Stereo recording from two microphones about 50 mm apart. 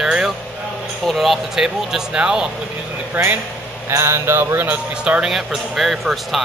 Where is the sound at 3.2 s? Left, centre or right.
Right.